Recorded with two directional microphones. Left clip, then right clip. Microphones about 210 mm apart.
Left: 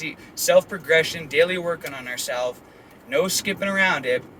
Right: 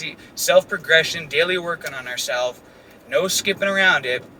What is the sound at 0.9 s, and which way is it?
Speech, 15° left (ahead or behind).